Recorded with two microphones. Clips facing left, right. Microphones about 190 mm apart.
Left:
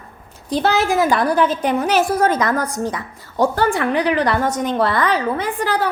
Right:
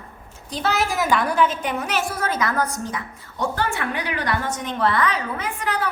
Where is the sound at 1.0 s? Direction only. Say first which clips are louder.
Left 2 dB; 35° left (ahead or behind).